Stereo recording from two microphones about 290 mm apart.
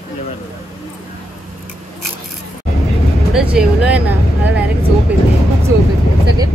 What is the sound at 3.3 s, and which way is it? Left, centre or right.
Speech, centre.